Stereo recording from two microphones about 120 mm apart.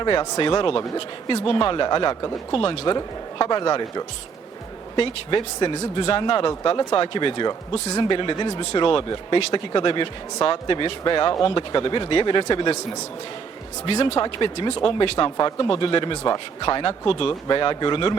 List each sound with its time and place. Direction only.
0.0 s speech: 40° left (ahead or behind)
2.5 s speech: 50° left (ahead or behind)
13.8 s speech: 50° left (ahead or behind)
15.4 s speech: 35° left (ahead or behind)